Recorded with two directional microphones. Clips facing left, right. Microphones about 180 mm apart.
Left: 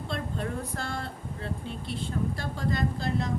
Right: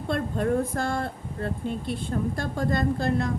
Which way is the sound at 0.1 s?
50° right (ahead or behind).